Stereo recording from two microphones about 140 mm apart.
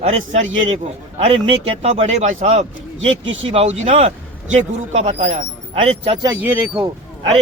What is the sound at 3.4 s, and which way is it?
A man's voice, 45° right (ahead or behind).